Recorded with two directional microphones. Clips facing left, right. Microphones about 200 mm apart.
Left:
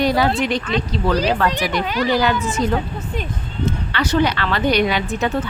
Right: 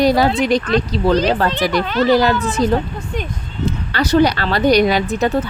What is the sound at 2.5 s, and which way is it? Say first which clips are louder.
Speech: right 4 dB; 35° right (ahead or behind).